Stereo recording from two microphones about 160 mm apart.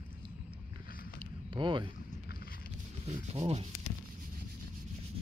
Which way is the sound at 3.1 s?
40° right (ahead or behind).